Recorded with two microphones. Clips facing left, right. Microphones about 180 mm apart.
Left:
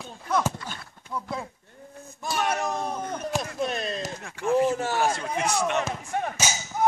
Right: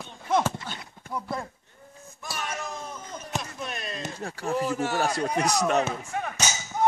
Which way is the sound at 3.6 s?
35° left (ahead or behind).